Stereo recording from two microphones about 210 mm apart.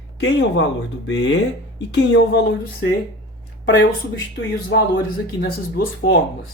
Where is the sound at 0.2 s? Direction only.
60° left (ahead or behind).